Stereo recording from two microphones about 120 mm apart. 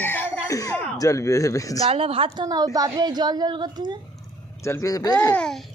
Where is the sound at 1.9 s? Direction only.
50° right (ahead or behind); by 3.9 s 35° right (ahead or behind).